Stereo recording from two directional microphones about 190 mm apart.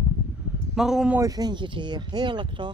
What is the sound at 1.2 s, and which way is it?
Speech, 20° right (ahead or behind).